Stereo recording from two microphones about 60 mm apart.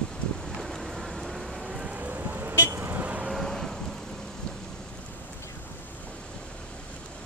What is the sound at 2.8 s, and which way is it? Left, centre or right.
Vehicle, right.